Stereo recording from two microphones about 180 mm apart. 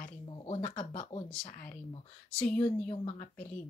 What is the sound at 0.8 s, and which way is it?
Speech, 40° left (ahead or behind).